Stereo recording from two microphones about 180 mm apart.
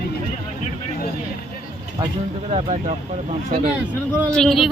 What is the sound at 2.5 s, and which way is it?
Speech, 40° right (ahead or behind).